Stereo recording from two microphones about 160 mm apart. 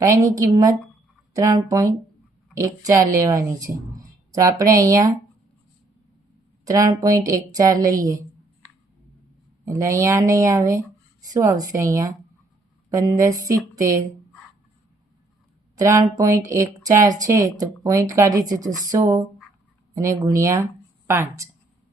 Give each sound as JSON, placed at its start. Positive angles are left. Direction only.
{"t": 0.0, "sound": "speech", "side_deg": -20}
{"t": 6.7, "sound": "speech", "side_deg": -20}
{"t": 9.6, "sound": "speech", "side_deg": -20}
{"t": 15.7, "sound": "speech", "side_deg": -20}